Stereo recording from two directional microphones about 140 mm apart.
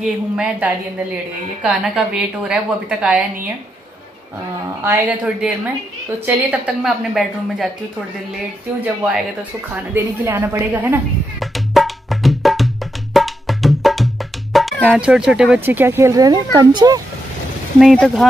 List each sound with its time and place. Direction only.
0.0 s a woman's voice: 5° right (ahead or behind)
4.8 s a woman's voice: 10° right (ahead or behind)
8.8 s a woman's voice: 10° right (ahead or behind)
11.3 s music: centre (ahead or behind)
15.0 s a woman's voice: 5° right (ahead or behind); by 17.0 s 30° right (ahead or behind)
17.7 s a woman's voice: centre (ahead or behind)